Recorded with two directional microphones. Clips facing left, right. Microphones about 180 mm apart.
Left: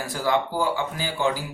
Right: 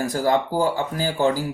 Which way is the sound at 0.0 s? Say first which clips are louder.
Right 4 dB; 40° right (ahead or behind).